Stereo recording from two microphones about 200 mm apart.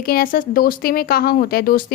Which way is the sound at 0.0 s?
45° left (ahead or behind).